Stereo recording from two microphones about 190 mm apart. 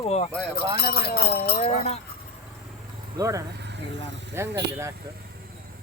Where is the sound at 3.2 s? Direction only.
15° right (ahead or behind).